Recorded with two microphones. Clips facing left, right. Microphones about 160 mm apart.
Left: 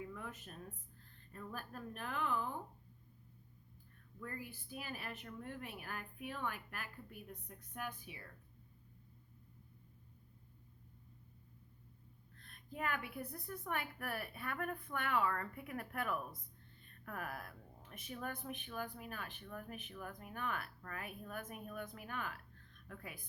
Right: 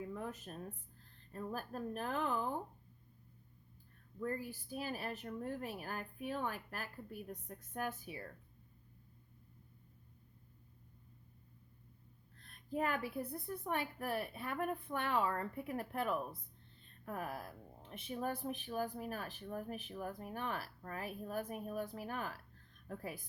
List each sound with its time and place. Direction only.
0.1 s a sound: 35° right (ahead or behind)
1.3 s speech: 35° right (ahead or behind)
4.2 s speech: 35° right (ahead or behind)
12.4 s a woman's voice: 40° right (ahead or behind)